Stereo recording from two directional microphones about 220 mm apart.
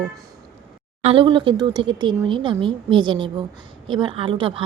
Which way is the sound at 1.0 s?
25° right (ahead or behind).